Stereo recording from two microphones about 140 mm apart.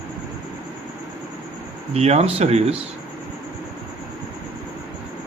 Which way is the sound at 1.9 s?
50° right (ahead or behind).